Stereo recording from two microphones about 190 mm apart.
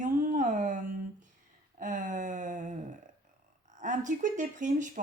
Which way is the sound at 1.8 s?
45° right (ahead or behind).